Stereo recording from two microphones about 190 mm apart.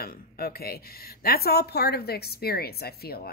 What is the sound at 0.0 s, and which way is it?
A woman's voice, 50° left (ahead or behind).